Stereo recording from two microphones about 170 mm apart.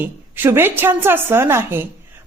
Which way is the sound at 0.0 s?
15° right (ahead or behind).